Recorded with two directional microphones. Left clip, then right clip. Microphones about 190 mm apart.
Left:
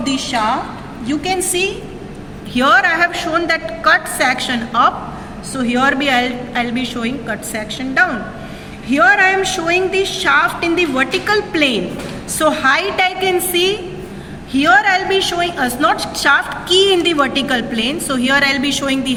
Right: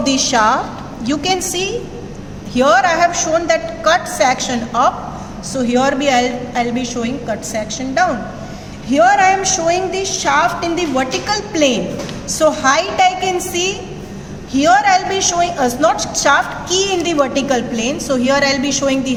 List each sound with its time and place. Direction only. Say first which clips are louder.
0.0 s a woman's voice: right 4 dB; 50° right (ahead or behind)
2.5 s a woman's voice: even; 10° right (ahead or behind)